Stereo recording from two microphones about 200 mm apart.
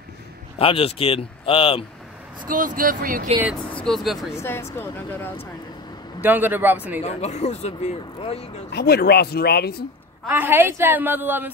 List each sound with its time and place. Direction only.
0.6 s speech: 30° left (ahead or behind)
2.4 s speech: 45° right (ahead or behind)
3.7 s speech: centre (ahead or behind)
4.4 s speech: 15° left (ahead or behind)
6.2 s a woman's voice: 10° right (ahead or behind)
7.0 s speech: 35° left (ahead or behind)
8.7 s speech: 50° left (ahead or behind)
10.2 s a woman's voice: 10° right (ahead or behind)